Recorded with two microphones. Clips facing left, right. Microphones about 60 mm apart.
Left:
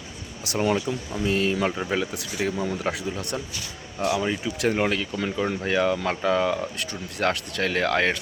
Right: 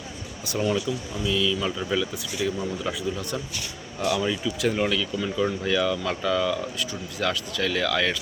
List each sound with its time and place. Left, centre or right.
0.6 s speech: left
4.0 s speech: left